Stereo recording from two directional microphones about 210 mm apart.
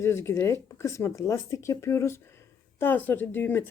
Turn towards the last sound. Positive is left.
turn(degrees=10)  # may be behind; listen again after turning